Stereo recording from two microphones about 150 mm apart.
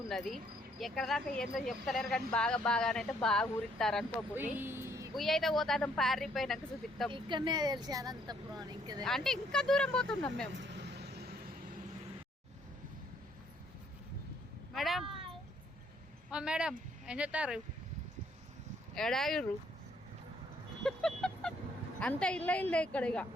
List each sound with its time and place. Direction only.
0.1 s speech: centre (ahead or behind)
4.4 s speech: 15° right (ahead or behind)
5.1 s speech: centre (ahead or behind)
7.1 s speech: 30° right (ahead or behind)
9.0 s speech: 5° left (ahead or behind)
10.8 s vehicle: 90° right
14.7 s a sound: centre (ahead or behind)
16.3 s speech: 5° right (ahead or behind)
18.9 s speech: 5° left (ahead or behind)
20.8 s vehicle: 5° left (ahead or behind)
22.0 s a woman's voice: 5° left (ahead or behind)